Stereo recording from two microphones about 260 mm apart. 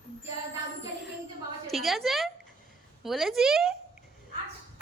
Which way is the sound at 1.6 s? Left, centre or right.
Centre.